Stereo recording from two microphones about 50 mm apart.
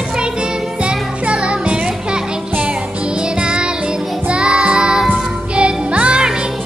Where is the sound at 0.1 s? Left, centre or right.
Centre.